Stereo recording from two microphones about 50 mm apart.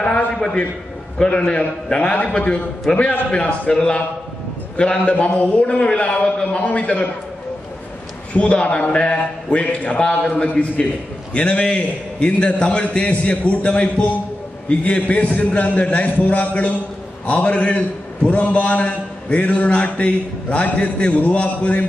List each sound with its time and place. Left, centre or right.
0.4 s a man's voice: left
8.3 s a man's voice: left